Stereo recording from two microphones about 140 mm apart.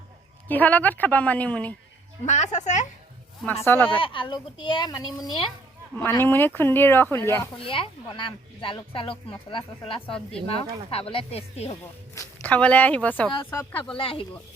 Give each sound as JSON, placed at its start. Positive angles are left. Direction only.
{"t": 0.4, "sound": "speech", "side_deg": 10}
{"t": 2.2, "sound": "a woman's voice", "side_deg": 55}
{"t": 3.6, "sound": "speech", "side_deg": 15}
{"t": 3.9, "sound": "speech", "side_deg": 40}
{"t": 6.0, "sound": "speech", "side_deg": 15}
{"t": 7.6, "sound": "speech", "side_deg": 40}
{"t": 10.1, "sound": "a woman's voice", "side_deg": 5}
{"t": 10.5, "sound": "speech", "side_deg": 45}
{"t": 12.4, "sound": "speech", "side_deg": 10}
{"t": 13.9, "sound": "speech", "side_deg": 40}